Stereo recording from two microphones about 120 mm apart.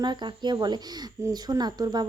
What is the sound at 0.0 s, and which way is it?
A woman's voice, 40° right (ahead or behind).